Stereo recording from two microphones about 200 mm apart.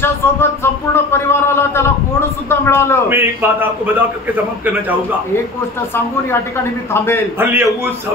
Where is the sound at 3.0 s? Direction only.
10° right (ahead or behind).